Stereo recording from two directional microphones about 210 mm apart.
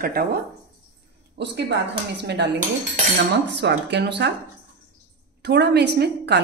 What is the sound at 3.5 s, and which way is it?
Speech, 55° right (ahead or behind).